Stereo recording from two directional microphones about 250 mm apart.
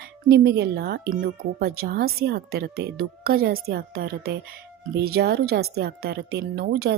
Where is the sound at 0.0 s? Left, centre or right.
Right.